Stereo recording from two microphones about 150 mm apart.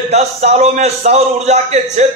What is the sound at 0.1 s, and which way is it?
A man's voice, 45° right (ahead or behind).